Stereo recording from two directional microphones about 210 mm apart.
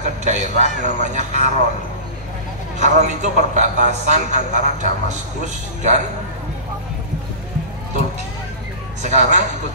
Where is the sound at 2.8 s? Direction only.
35° right (ahead or behind).